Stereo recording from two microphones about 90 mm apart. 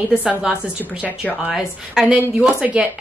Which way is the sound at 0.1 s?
10° right (ahead or behind).